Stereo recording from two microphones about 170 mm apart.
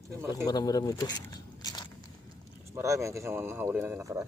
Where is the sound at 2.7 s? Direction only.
20° right (ahead or behind).